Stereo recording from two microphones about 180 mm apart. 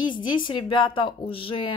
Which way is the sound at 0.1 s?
25° left (ahead or behind).